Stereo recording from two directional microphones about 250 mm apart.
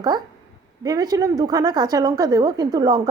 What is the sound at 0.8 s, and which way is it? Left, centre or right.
A woman's voice, centre.